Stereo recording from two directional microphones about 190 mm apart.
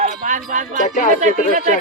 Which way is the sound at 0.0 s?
45° right (ahead or behind).